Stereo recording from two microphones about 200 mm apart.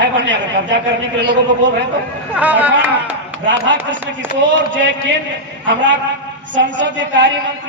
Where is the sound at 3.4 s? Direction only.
65° right (ahead or behind).